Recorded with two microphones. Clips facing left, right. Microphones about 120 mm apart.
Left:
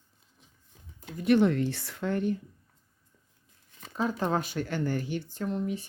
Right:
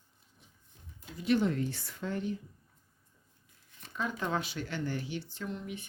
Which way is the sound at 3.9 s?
35° left (ahead or behind).